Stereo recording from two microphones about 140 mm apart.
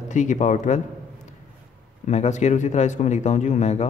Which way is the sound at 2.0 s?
55° left (ahead or behind).